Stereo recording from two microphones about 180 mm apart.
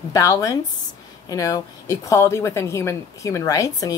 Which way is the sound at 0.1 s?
20° left (ahead or behind).